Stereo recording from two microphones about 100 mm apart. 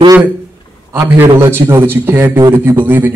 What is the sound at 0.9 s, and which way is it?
A man's voice, 25° right (ahead or behind).